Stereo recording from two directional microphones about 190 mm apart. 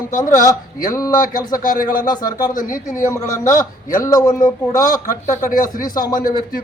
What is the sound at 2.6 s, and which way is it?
Speech, 45° left (ahead or behind).